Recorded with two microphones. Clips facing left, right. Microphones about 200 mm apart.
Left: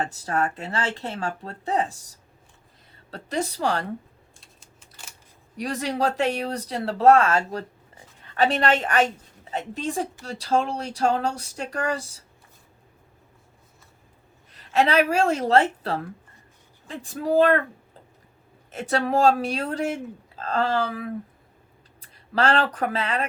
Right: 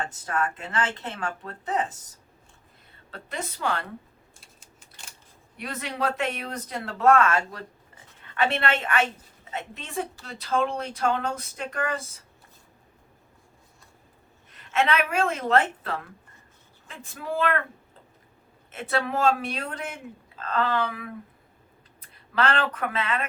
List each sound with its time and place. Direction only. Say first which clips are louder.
0.0 s a woman's voice: left 3 dB; 35° left (ahead or behind)
3.1 s a woman's voice: left 7 dB; 40° left (ahead or behind)
4.4 s typing: left 1 dB; centre (ahead or behind)
5.5 s a woman's voice: left 6 dB; 35° left (ahead or behind)
14.5 s a woman's voice: left 4 dB; 35° left (ahead or behind)
18.8 s a woman's voice: left 4 dB; 40° left (ahead or behind)
22.4 s a woman's voice: left 3 dB; 40° left (ahead or behind)